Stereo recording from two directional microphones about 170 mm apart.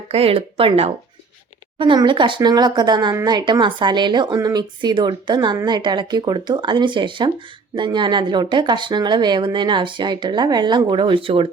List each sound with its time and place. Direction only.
0.1 s speech: 35° right (ahead or behind)